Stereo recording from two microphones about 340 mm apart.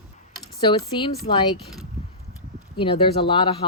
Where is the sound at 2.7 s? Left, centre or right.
Centre.